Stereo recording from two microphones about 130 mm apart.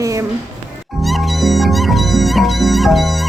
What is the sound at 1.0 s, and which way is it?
Music, centre (ahead or behind).